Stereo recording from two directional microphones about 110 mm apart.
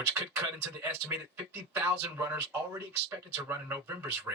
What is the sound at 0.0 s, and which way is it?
Speech, 20° right (ahead or behind).